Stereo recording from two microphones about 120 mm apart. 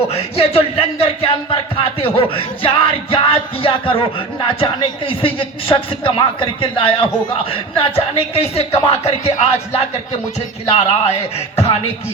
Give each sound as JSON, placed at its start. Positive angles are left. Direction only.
{"t": 0.1, "sound": "speech", "side_deg": 60}
{"t": 2.1, "sound": "music", "side_deg": 50}
{"t": 8.9, "sound": "speech", "side_deg": 60}